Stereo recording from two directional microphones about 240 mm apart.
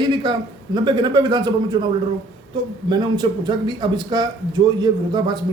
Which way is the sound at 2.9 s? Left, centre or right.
Centre.